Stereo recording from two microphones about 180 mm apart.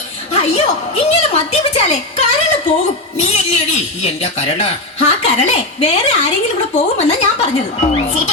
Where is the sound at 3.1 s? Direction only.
40° left (ahead or behind).